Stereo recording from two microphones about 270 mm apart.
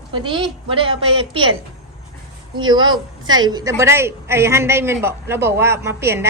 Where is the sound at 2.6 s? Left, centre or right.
Centre.